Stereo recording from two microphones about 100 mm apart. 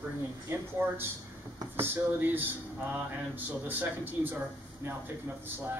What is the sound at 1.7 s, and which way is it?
Speech, 20° right (ahead or behind).